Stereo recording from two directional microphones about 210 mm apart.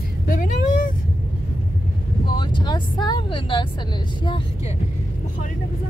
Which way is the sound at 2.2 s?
20° left (ahead or behind).